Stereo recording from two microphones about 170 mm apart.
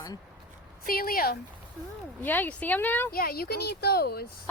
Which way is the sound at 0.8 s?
60° left (ahead or behind).